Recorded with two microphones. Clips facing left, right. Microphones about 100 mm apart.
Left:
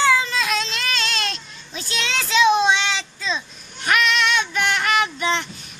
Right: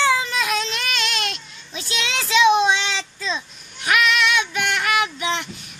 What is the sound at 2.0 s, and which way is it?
Child singing, 15° right (ahead or behind).